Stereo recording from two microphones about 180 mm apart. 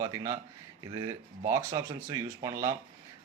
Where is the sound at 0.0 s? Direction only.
15° right (ahead or behind).